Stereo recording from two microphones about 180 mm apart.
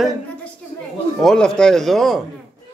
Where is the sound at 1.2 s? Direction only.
5° left (ahead or behind).